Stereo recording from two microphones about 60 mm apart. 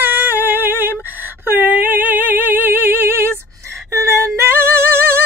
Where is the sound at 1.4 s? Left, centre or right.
Right.